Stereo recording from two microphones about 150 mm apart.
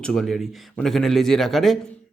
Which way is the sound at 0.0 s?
Centre (ahead or behind).